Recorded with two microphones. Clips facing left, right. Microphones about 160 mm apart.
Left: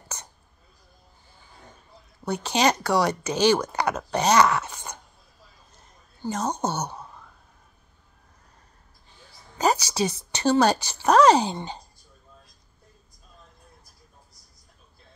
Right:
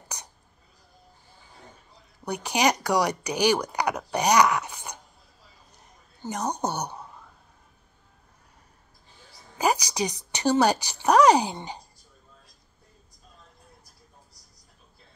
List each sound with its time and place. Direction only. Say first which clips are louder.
2.2 s speech: left 2 dB; 15° right (ahead or behind)
5.8 s a sound: left 4 dB; 15° right (ahead or behind)
9.6 s speech: left 2 dB; 15° right (ahead or behind)